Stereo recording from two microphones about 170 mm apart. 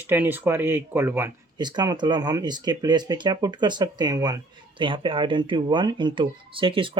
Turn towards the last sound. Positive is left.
turn(degrees=-30)  # may be behind; listen again after turning